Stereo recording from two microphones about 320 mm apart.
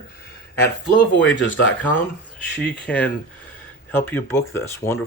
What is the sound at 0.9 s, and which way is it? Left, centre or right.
Speech, left.